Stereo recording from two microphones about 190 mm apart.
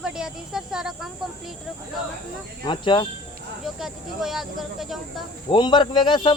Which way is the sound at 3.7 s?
Centre (ahead or behind).